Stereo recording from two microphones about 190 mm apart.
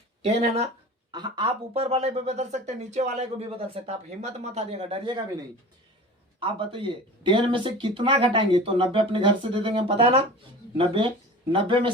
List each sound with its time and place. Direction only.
0.2 s speech: 35° right (ahead or behind)
1.1 s speech: 25° right (ahead or behind)
6.4 s speech: 25° right (ahead or behind)